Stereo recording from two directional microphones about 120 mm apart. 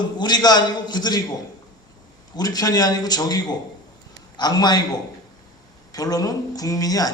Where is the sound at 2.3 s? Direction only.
35° left (ahead or behind).